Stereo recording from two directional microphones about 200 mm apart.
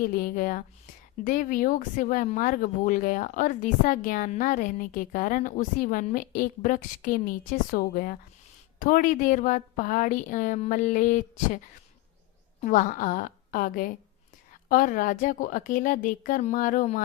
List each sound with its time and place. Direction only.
0.0 s a woman's voice: 45° left (ahead or behind)
12.6 s a woman's voice: 40° left (ahead or behind)